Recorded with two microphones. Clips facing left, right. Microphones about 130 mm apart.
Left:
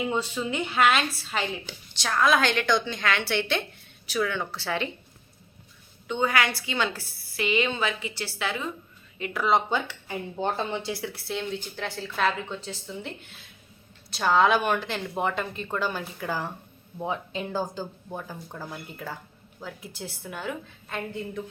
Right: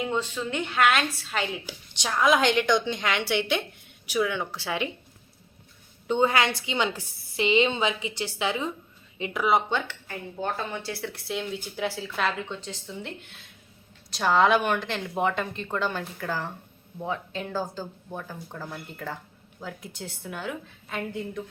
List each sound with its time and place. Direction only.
0.0 s speech: 10° left (ahead or behind)
1.9 s a woman's voice: 15° right (ahead or behind)
6.1 s a woman's voice: 30° right (ahead or behind); by 9.6 s 10° right (ahead or behind)
9.6 s speech: 10° left (ahead or behind)
10.4 s speech: 25° left (ahead or behind)
10.9 s speech: 5° left (ahead or behind)